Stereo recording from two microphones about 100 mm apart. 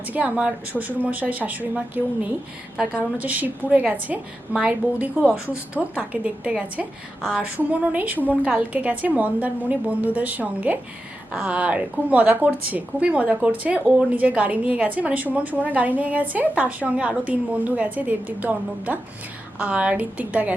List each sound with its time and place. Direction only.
0.1 s a woman's voice: 15° right (ahead or behind)